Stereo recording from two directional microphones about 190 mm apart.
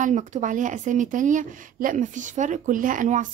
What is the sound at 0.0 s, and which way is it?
Speech, 40° right (ahead or behind).